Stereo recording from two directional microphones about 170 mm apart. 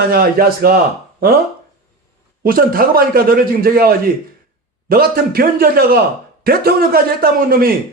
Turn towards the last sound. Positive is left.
turn(degrees=-60)  # may be behind; listen again after turning